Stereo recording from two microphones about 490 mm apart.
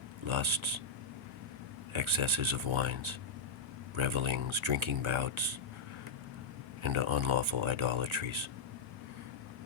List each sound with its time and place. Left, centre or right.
0.3 s speech: right
1.9 s speech: right
6.8 s speech: right